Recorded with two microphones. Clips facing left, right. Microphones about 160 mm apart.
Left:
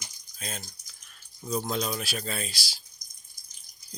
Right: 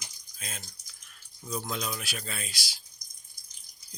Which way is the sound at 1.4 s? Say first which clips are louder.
Left 5 dB; 35° left (ahead or behind).